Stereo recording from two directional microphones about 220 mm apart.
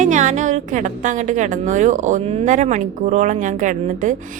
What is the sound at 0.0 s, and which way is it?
A woman's voice, 35° right (ahead or behind).